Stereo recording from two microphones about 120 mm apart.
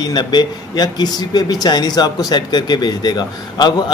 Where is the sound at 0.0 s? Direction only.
35° left (ahead or behind).